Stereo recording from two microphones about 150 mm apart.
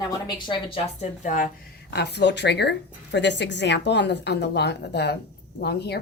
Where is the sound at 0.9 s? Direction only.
55° left (ahead or behind).